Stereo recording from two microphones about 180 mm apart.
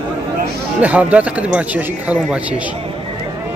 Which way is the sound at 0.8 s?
10° right (ahead or behind).